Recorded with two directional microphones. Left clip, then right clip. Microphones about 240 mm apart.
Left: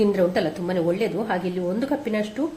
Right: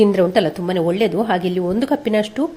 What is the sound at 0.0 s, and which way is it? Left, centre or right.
A woman's voice, right.